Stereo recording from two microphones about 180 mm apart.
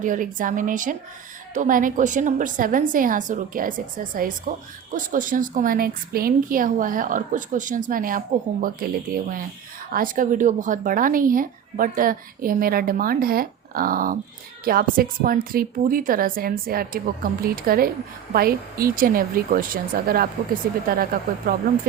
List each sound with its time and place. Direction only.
0.0 s a woman's voice: 45° right (ahead or behind)